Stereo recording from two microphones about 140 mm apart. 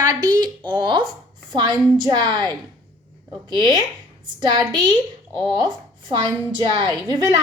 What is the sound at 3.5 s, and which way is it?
A woman's voice, 35° right (ahead or behind).